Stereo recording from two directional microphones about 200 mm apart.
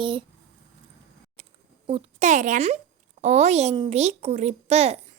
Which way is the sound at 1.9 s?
35° right (ahead or behind).